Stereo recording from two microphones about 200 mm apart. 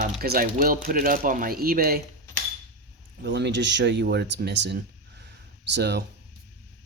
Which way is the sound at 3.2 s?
55° right (ahead or behind).